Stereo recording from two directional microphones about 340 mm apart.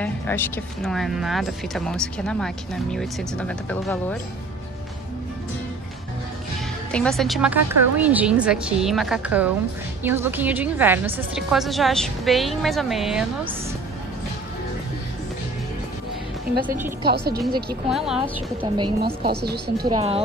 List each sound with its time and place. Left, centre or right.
0.0 s speech: centre
6.9 s speech: centre
17.1 s a woman's voice: right
17.8 s speech: centre
18.6 s a woman's voice: centre
19.2 s a woman's voice: right
19.9 s a woman's voice: centre